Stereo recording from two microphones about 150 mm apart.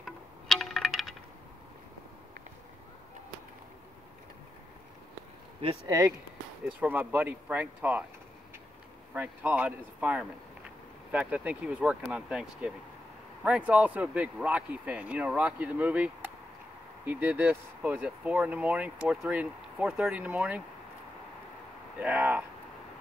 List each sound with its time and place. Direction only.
0.0 s wind chime: centre (ahead or behind)
5.9 s speech: 20° right (ahead or behind)
9.1 s speech: 10° right (ahead or behind)
21.9 s speech: 10° right (ahead or behind)